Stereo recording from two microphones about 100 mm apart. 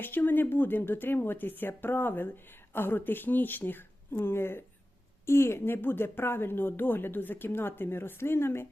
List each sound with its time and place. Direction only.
0.0 s speech: 20° left (ahead or behind)